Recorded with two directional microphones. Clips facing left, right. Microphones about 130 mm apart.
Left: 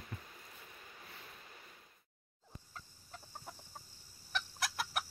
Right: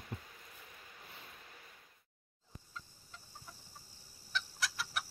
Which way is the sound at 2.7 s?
50° left (ahead or behind).